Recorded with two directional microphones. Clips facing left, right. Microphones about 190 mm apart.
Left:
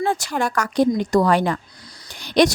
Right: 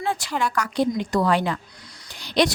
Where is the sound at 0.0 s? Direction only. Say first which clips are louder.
Left 3 dB; 45° left (ahead or behind).